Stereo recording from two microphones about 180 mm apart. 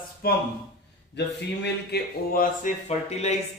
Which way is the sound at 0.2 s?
60° left (ahead or behind).